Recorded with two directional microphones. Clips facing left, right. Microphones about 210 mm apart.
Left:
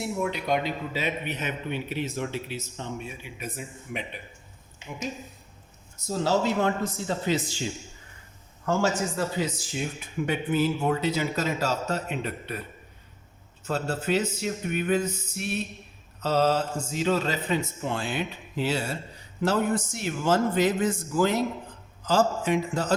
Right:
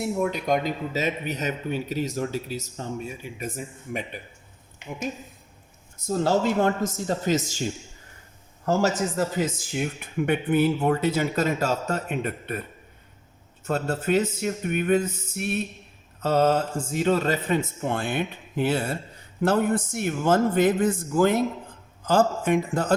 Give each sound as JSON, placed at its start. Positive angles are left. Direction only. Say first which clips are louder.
{"t": 0.2, "sound": "a man's voice", "louder": "right 2 dB", "side_deg": -45}
{"t": 6.0, "sound": "a man's voice", "louder": "right 2 dB", "side_deg": -50}
{"t": 8.6, "sound": "a man's voice", "louder": "right 2 dB", "side_deg": -40}
{"t": 13.7, "sound": "a man's voice", "louder": "right 3 dB", "side_deg": -50}